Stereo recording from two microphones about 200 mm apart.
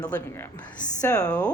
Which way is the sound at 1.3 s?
5° left (ahead or behind).